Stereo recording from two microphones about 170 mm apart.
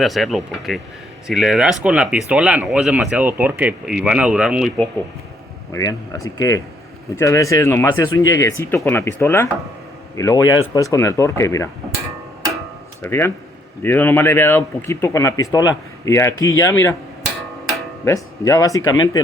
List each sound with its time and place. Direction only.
0.0 s speech: centre (ahead or behind)
5.7 s a man's voice: 20° left (ahead or behind)
13.0 s speech: 15° left (ahead or behind)
18.0 s a man's voice: 20° left (ahead or behind)